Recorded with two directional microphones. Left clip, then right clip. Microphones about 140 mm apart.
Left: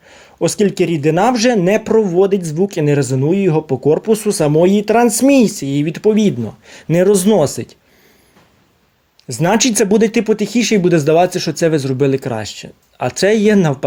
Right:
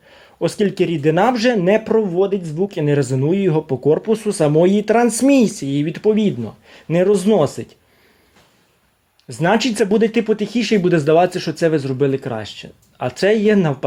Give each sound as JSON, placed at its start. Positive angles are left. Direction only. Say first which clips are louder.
{"t": 0.1, "sound": "speech", "louder": "left 4 dB", "side_deg": 25}
{"t": 2.1, "sound": "speech", "louder": "left 5 dB", "side_deg": 40}
{"t": 4.1, "sound": "speech", "louder": "left 2 dB", "side_deg": 25}
{"t": 9.3, "sound": "speech", "louder": "left 2 dB", "side_deg": 25}